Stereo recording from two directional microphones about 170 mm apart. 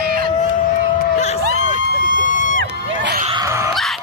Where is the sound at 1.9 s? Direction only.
55° left (ahead or behind).